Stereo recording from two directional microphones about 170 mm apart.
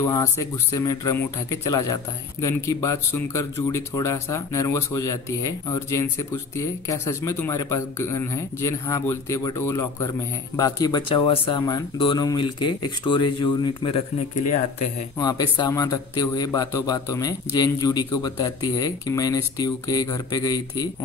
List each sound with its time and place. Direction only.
0.0 s speech: 20° left (ahead or behind)
15.1 s speech: 25° left (ahead or behind)